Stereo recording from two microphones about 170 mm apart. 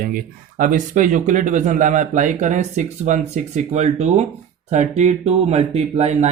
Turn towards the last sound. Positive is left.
turn(degrees=-40)  # may be behind; listen again after turning